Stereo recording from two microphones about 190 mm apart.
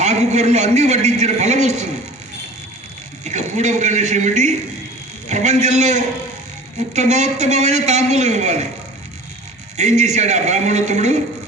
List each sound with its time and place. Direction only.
0.0 s a man's voice: 35° right (ahead or behind)
3.2 s a man's voice: 40° right (ahead or behind)
9.7 s a man's voice: 35° right (ahead or behind)